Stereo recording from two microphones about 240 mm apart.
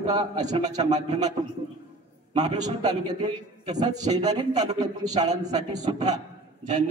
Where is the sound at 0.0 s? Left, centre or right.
Centre.